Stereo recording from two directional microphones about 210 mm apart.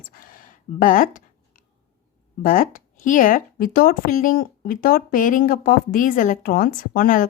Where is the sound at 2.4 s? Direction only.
40° left (ahead or behind).